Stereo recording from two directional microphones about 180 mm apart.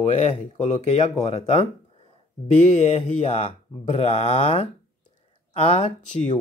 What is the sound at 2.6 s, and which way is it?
Speech, 40° left (ahead or behind).